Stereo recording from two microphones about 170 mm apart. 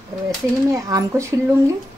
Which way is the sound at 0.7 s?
20° right (ahead or behind).